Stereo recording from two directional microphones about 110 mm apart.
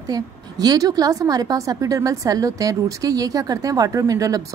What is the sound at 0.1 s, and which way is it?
A woman's voice, 35° right (ahead or behind).